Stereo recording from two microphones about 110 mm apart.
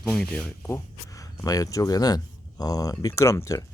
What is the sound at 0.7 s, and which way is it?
Speech, 30° left (ahead or behind).